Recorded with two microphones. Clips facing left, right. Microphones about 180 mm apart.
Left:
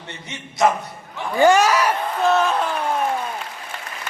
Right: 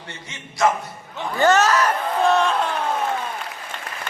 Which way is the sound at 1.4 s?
10° left (ahead or behind).